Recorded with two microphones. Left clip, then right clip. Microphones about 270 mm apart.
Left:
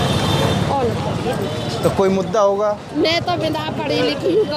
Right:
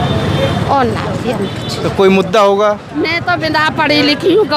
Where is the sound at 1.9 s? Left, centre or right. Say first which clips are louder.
Right 9 dB; right.